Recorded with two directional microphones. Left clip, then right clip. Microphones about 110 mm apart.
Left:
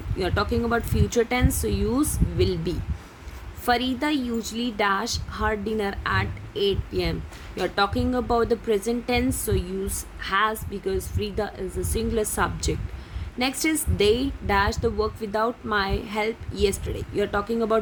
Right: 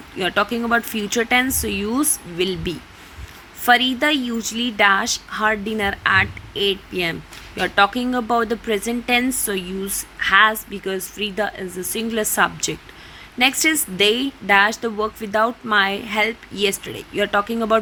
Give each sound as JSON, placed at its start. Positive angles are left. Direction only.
{"t": 0.2, "sound": "a woman's voice", "side_deg": -25}